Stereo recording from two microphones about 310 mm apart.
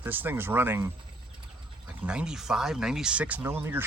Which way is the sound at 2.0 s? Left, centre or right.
Centre.